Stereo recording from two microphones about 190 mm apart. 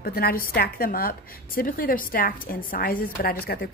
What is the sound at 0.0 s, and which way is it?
A woman's voice, 55° left (ahead or behind).